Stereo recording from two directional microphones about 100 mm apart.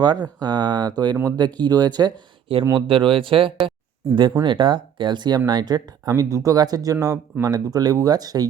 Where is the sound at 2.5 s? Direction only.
65° right (ahead or behind).